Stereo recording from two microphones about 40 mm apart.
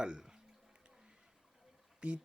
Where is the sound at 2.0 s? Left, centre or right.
Right.